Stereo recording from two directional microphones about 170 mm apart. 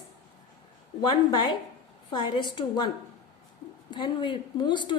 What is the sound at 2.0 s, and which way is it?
Speech, 25° left (ahead or behind).